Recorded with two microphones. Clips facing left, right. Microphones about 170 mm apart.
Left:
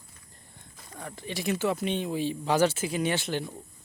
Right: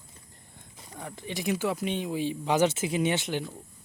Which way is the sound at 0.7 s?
10° right (ahead or behind).